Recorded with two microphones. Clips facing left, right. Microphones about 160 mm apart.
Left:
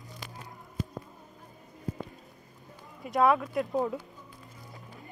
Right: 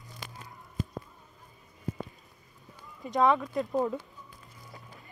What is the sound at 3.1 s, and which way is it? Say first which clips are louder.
Speech: left 1 dB; 5° left (ahead or behind).